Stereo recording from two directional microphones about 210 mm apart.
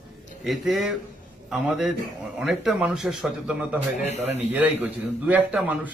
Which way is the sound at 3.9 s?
35° left (ahead or behind).